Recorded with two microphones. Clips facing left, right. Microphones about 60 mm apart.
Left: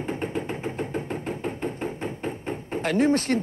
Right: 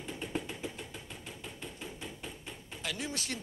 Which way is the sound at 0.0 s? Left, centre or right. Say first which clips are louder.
Left 9 dB; left.